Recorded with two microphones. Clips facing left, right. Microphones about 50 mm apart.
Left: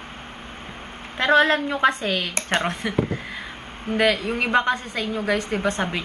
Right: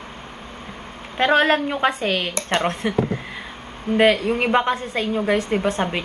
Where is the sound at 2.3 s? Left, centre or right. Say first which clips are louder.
Right 1 dB; left.